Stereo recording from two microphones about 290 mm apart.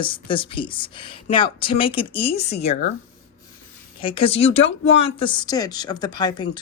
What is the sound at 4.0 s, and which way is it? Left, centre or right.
Speech, centre.